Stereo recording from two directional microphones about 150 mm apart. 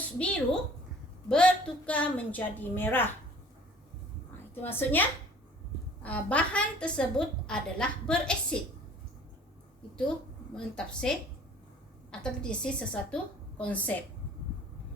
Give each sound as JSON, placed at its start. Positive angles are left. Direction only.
{"t": 0.2, "sound": "a woman's voice", "side_deg": 10}
{"t": 4.6, "sound": "a woman's voice", "side_deg": 15}
{"t": 10.5, "sound": "a woman's voice", "side_deg": 5}
{"t": 12.2, "sound": "a woman's voice", "side_deg": 5}